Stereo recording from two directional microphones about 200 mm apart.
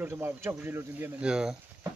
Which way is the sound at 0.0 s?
10° right (ahead or behind).